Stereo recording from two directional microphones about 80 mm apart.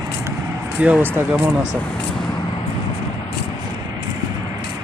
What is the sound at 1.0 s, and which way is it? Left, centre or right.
Speech, right.